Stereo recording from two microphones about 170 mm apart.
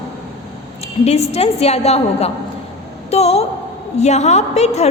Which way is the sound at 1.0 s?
40° left (ahead or behind).